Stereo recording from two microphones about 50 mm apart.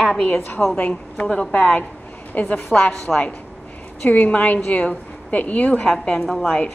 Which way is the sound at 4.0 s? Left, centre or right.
Left.